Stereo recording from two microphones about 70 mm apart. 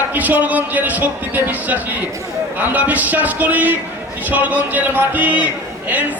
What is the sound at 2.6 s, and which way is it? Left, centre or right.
Speech, right.